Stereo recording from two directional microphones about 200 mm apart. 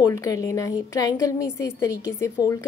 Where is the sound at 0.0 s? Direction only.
15° left (ahead or behind).